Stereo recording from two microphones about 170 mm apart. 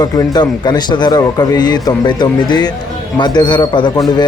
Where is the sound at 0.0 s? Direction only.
25° left (ahead or behind).